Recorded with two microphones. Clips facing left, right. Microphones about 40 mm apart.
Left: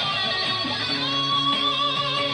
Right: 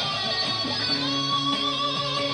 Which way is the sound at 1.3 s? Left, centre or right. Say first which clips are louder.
Left 4 dB; left.